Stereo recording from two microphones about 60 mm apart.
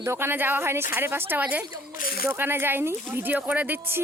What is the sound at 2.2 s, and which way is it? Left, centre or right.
Speech, right.